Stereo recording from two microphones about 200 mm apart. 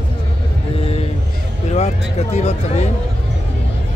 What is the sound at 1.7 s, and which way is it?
Speech, 35° left (ahead or behind).